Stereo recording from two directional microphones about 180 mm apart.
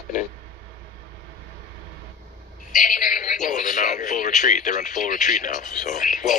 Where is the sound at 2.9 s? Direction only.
50° left (ahead or behind).